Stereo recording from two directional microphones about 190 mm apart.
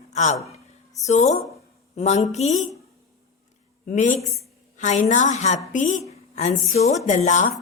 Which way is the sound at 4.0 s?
40° left (ahead or behind).